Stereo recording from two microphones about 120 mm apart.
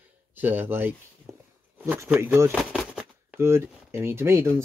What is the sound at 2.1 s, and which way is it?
Speech, 20° right (ahead or behind).